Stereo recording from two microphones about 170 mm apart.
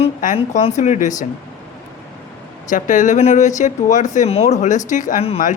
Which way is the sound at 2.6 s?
50° left (ahead or behind).